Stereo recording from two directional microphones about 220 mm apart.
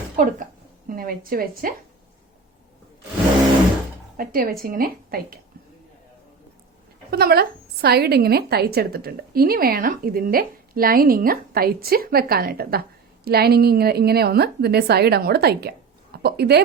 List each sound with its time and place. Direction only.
0.2 s a woman's voice: 35° right (ahead or behind)
4.2 s a woman's voice: 40° right (ahead or behind)
7.1 s a woman's voice: 45° right (ahead or behind)